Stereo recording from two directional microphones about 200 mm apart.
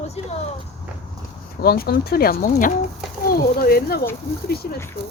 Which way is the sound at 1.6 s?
50° left (ahead or behind).